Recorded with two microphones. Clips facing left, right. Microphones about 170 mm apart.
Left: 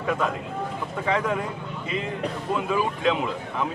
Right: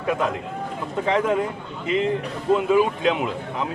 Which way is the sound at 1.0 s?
20° right (ahead or behind).